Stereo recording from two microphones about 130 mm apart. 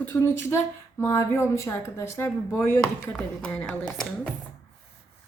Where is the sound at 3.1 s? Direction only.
10° left (ahead or behind).